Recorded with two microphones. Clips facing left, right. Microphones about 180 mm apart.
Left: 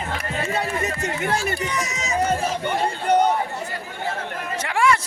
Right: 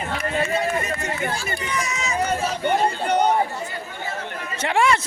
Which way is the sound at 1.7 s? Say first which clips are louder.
Right 1 dB; 40° left (ahead or behind).